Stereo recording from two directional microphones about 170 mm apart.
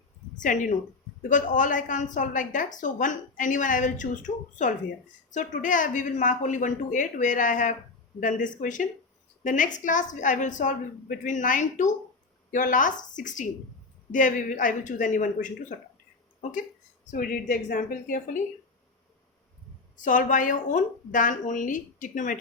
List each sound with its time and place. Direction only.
0.3 s a woman's voice: 50° left (ahead or behind)
20.1 s a woman's voice: 50° left (ahead or behind)